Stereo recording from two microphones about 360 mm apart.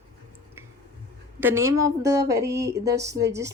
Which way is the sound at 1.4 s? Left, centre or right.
Centre.